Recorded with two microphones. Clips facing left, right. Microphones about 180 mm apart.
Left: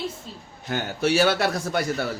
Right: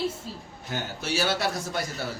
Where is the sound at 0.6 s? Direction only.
65° left (ahead or behind).